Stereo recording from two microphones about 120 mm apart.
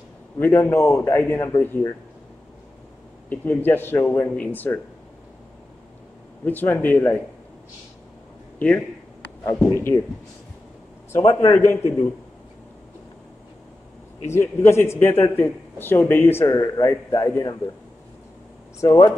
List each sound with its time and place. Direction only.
0.4 s speech: 20° left (ahead or behind)
3.3 s speech: 15° left (ahead or behind)
6.4 s speech: 15° left (ahead or behind)
8.5 s a man's voice: 10° left (ahead or behind)
11.3 s speech: 20° left (ahead or behind)
14.2 s speech: 20° left (ahead or behind)
18.8 s speech: 30° left (ahead or behind)